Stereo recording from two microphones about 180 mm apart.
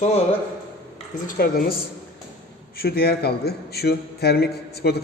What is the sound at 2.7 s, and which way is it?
A man's voice, 60° left (ahead or behind).